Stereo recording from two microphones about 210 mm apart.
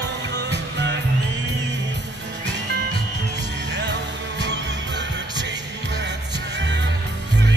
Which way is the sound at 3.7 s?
55° right (ahead or behind).